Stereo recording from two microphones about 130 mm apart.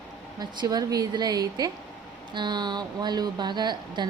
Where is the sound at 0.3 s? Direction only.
30° right (ahead or behind).